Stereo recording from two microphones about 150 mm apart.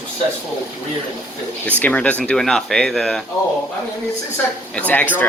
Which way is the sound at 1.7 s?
10° left (ahead or behind).